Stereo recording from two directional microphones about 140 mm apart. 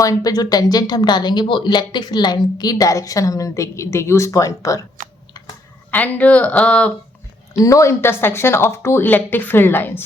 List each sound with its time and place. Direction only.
0.0 s speech: 25° left (ahead or behind)
5.9 s speech: 10° left (ahead or behind)
7.5 s speech: 25° left (ahead or behind)